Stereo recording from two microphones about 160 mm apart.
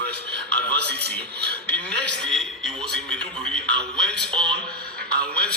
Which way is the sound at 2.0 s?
5° left (ahead or behind).